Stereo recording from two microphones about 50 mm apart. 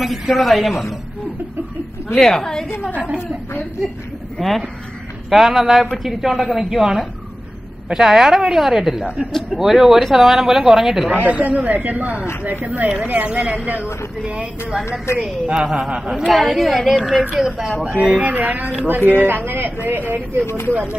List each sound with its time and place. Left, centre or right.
0.0 s a woman's voice: centre
2.1 s a woman's voice: centre
4.4 s a woman's voice: centre
11.1 s speech: right
15.1 s a woman's voice: left
15.4 s a woman's voice: centre
16.1 s a woman's voice: centre
18.2 s speech: right
20.4 s speech: left